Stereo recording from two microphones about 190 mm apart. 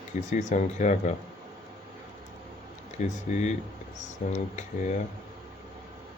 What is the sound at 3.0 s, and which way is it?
Speech, 40° left (ahead or behind).